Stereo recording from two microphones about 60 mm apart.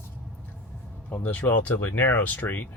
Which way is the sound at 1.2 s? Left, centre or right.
Left.